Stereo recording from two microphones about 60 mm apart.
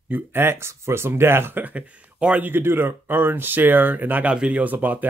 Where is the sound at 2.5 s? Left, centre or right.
Right.